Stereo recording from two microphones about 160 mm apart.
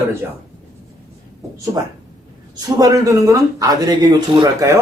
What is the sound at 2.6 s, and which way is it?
Speech, 25° right (ahead or behind).